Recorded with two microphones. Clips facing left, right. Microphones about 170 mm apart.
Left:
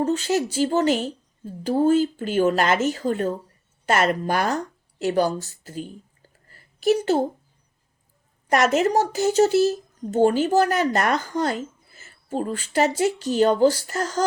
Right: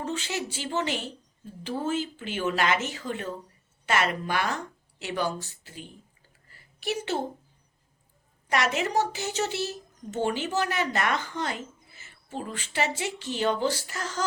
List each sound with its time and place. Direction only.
0.0 s speech: 40° left (ahead or behind)
6.5 s a sound: 40° left (ahead or behind)
8.4 s speech: 45° left (ahead or behind)